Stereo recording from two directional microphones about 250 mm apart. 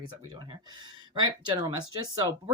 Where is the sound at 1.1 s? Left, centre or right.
Centre.